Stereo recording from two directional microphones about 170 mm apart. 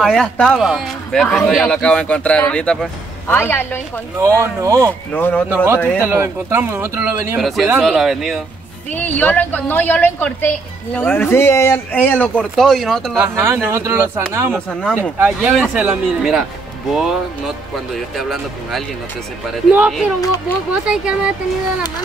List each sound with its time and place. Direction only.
0.0 s a man's voice: 5° left (ahead or behind)
4.2 s speech: 15° right (ahead or behind)
4.8 s speech: 10° left (ahead or behind)
6.0 s speech: 15° right (ahead or behind)
7.3 s a man's voice: centre (ahead or behind)
8.9 s speech: 10° left (ahead or behind)
13.2 s speech: 15° right (ahead or behind)
14.7 s a man's voice: 5° left (ahead or behind)
15.0 s a man's voice: 10° right (ahead or behind)
20.2 s speech: 20° left (ahead or behind)
20.8 s a man's voice: 5° right (ahead or behind)